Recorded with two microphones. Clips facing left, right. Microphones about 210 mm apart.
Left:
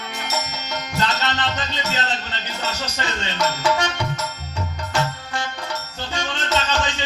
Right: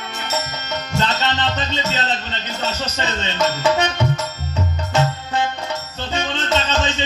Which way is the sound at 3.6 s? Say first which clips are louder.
Right 3 dB; 20° right (ahead or behind).